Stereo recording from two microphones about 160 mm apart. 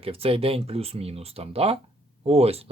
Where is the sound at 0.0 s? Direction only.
35° right (ahead or behind).